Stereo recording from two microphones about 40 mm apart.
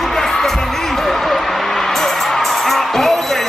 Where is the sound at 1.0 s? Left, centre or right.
Centre.